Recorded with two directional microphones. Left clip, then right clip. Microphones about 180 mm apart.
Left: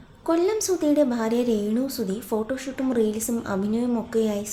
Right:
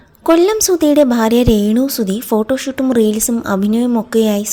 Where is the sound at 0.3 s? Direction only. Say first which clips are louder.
Right 11 dB; 50° right (ahead or behind).